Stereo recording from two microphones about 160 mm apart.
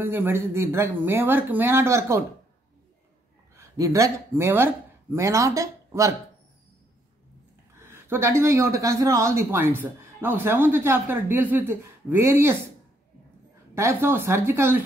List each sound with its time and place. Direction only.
0.0 s speech: 15° right (ahead or behind)
3.5 s speech: 20° right (ahead or behind)
7.8 s speech: 15° right (ahead or behind)
13.7 s speech: 15° right (ahead or behind)